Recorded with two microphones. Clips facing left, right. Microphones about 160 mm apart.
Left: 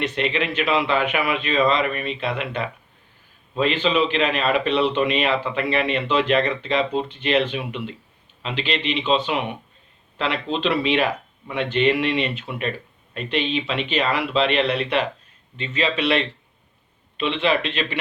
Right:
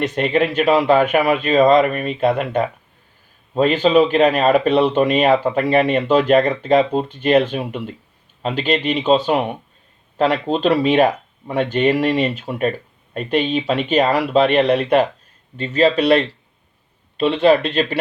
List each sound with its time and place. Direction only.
0.0 s speech: 45° right (ahead or behind)